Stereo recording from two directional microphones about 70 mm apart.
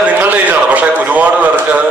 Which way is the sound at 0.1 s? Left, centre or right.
Right.